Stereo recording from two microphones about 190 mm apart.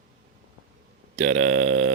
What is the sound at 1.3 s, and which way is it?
Speech, 40° right (ahead or behind).